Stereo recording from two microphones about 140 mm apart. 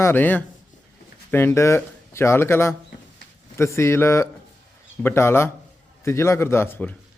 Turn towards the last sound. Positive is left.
turn(degrees=15)  # may be behind; listen again after turning